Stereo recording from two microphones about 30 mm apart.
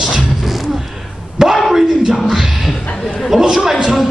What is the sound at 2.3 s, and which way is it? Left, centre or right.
Speech, centre.